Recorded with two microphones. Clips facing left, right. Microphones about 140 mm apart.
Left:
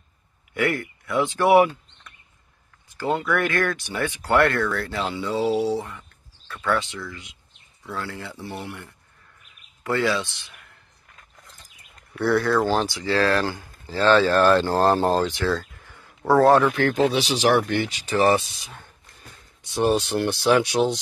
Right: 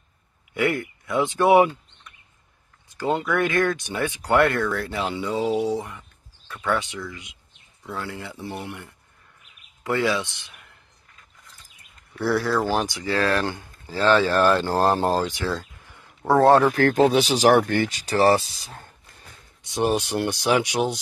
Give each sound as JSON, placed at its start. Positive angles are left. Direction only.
{"t": 0.6, "sound": "speech", "side_deg": -20}
{"t": 2.9, "sound": "speech", "side_deg": -20}
{"t": 5.7, "sound": "a sound", "side_deg": -15}
{"t": 6.6, "sound": "speech", "side_deg": -15}
{"t": 12.2, "sound": "speech", "side_deg": 0}
{"t": 12.7, "sound": "speech", "side_deg": -20}
{"t": 16.3, "sound": "speech", "side_deg": -25}
{"t": 19.6, "sound": "speech", "side_deg": -15}